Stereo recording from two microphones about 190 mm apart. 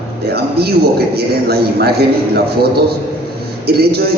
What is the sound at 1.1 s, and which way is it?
A man's voice, 55° right (ahead or behind).